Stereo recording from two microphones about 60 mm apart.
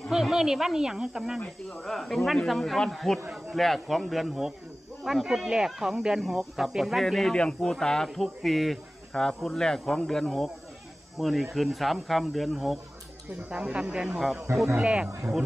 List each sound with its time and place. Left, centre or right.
0.1 s speech: centre
1.7 s speech: centre
7.3 s speech: centre
13.5 s speech: centre
14.8 s speech: centre